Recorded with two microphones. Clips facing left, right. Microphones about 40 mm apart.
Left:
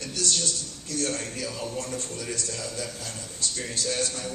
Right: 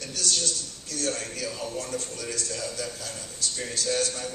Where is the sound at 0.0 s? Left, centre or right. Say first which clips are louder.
Left 1 dB; left.